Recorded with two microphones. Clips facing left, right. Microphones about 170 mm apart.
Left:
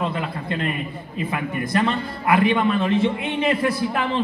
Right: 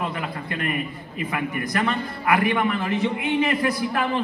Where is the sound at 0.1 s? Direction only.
25° left (ahead or behind).